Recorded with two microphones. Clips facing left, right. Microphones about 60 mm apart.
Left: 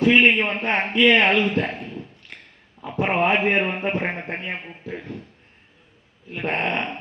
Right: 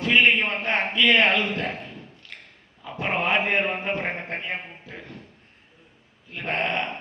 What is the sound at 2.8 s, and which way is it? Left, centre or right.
A man's voice, left.